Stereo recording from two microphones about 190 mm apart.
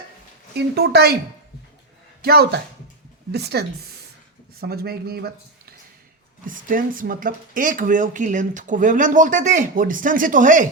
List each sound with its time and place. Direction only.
0.5 s speech: 60° right (ahead or behind)
2.2 s speech: 55° right (ahead or behind)
6.4 s speech: 45° right (ahead or behind)